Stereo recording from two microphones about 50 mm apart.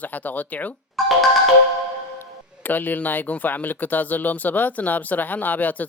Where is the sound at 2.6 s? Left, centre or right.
Left.